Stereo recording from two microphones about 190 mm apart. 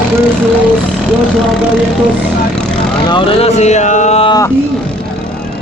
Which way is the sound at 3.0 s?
25° left (ahead or behind).